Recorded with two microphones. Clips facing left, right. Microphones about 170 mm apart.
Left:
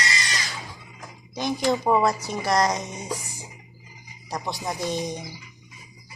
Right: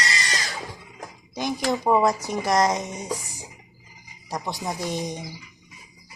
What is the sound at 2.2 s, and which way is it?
Speech, 20° right (ahead or behind).